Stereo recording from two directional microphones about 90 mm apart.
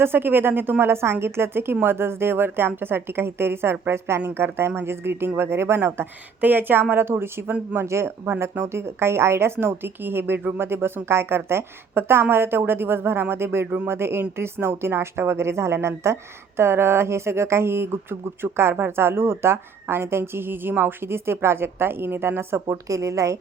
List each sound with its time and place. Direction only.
0.0 s a woman's voice: 25° right (ahead or behind)
22.7 s speech: 35° right (ahead or behind)